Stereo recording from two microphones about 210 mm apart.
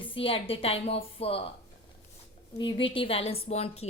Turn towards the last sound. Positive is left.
turn(degrees=30)  # may be behind; listen again after turning